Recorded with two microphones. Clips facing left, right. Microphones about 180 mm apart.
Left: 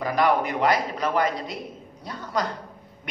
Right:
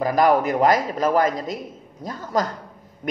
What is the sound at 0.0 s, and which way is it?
A man's voice, 40° right (ahead or behind).